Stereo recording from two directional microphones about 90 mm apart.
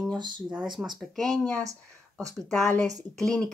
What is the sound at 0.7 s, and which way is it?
Speech, centre (ahead or behind).